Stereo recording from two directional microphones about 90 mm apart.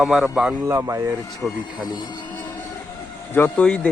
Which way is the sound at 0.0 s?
5° right (ahead or behind).